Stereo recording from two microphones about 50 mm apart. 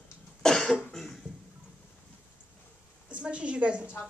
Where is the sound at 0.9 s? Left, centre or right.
Centre.